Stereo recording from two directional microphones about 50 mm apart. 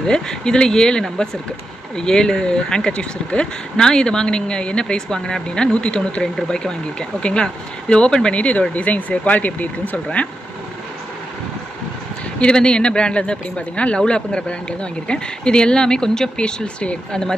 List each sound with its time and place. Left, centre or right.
0.0 s speech: centre
12.4 s speech: centre